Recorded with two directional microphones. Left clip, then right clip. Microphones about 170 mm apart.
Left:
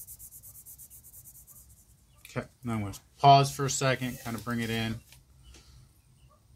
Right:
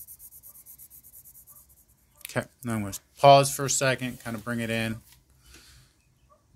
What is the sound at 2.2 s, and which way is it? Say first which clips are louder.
Speech: right 7 dB; 45° right (ahead or behind).